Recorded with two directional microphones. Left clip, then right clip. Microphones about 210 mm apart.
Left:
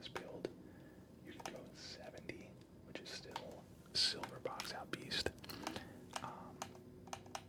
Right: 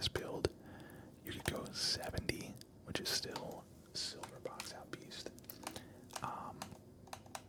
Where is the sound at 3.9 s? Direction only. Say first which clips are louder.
Left 7 dB; 10° left (ahead or behind).